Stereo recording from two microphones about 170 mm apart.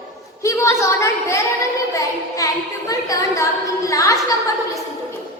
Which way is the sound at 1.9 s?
20° left (ahead or behind).